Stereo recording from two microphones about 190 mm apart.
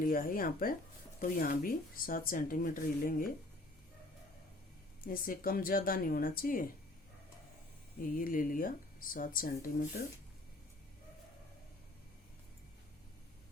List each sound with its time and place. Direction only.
0.0 s speech: 45° left (ahead or behind)
5.0 s speech: 50° left (ahead or behind)
8.1 s speech: 50° left (ahead or behind)